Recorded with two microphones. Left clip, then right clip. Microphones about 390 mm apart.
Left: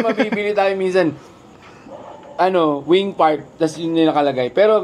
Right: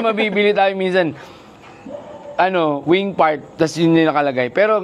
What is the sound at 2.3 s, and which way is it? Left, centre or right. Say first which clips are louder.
A woman's voice: even; right.